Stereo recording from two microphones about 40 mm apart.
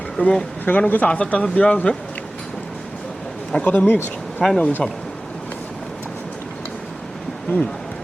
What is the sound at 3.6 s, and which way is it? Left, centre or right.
Speech, left.